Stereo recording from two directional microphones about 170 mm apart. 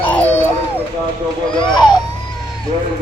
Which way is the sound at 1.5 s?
30° left (ahead or behind).